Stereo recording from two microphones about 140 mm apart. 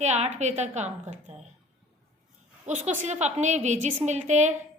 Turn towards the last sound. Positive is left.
turn(degrees=-55)  # may be behind; listen again after turning